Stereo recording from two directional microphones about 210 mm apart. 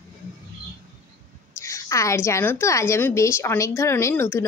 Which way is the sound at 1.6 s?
15° left (ahead or behind).